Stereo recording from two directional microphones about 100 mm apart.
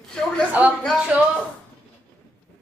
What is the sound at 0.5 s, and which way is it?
Speech, 15° right (ahead or behind).